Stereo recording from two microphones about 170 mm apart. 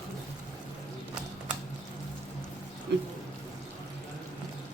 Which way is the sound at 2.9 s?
90° right.